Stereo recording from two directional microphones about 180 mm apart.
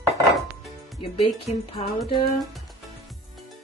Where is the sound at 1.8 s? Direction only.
25° left (ahead or behind).